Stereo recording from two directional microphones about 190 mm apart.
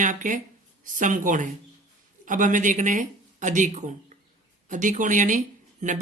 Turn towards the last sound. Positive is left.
turn(degrees=-40)  # may be behind; listen again after turning